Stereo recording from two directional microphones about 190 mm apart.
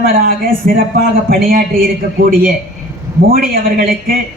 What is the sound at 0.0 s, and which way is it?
Speech, 50° right (ahead or behind).